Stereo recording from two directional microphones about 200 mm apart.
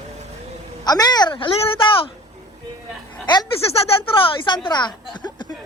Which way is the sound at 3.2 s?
20° left (ahead or behind).